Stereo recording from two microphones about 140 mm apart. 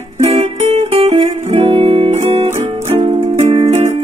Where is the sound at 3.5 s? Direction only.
45° right (ahead or behind).